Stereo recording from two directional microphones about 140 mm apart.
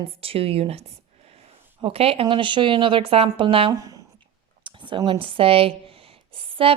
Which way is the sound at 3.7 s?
25° right (ahead or behind).